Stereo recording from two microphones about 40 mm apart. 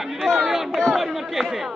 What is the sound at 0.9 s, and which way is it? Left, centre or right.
Speech, centre.